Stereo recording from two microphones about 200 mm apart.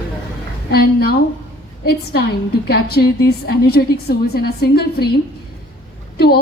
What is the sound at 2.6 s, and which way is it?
A woman's voice, 50° left (ahead or behind).